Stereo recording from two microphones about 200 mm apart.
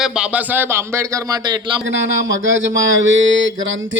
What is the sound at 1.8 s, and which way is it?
Speech, 70° right (ahead or behind).